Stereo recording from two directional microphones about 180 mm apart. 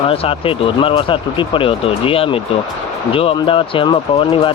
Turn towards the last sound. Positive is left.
turn(degrees=30)  # may be behind; listen again after turning